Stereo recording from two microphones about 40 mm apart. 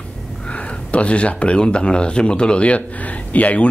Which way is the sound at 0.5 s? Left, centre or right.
Left.